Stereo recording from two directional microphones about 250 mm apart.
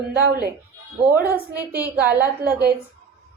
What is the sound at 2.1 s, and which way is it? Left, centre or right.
Speech, right.